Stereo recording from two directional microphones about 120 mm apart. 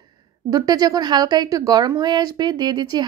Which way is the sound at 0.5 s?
30° right (ahead or behind).